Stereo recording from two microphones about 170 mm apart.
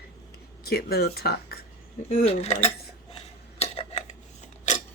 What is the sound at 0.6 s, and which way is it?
Speech, 65° left (ahead or behind).